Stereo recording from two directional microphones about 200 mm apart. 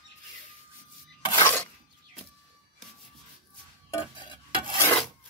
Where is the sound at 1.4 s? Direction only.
10° left (ahead or behind).